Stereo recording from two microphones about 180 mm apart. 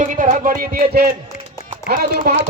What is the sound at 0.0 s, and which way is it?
A man's voice, 45° right (ahead or behind).